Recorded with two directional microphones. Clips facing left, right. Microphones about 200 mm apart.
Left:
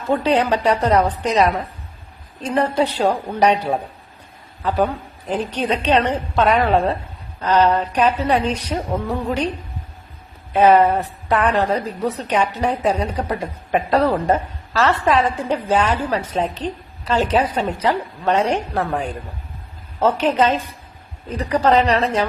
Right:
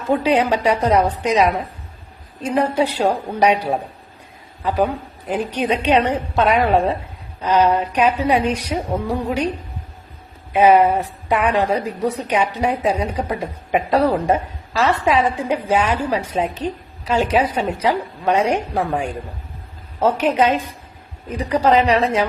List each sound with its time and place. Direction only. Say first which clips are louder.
0.1 s a woman's voice: right 1 dB; 10° right (ahead or behind)
10.5 s a woman's voice: even; 10° right (ahead or behind)